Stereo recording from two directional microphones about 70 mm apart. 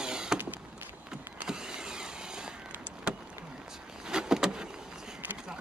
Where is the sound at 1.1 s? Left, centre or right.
Centre.